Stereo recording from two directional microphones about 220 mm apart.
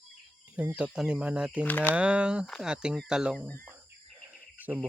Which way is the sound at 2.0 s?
5° right (ahead or behind).